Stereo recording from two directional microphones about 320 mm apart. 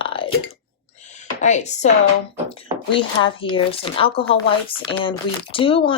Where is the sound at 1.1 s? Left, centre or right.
Left.